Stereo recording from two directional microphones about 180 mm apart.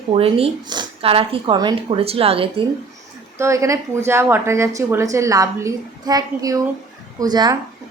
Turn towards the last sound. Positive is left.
turn(degrees=-20)  # may be behind; listen again after turning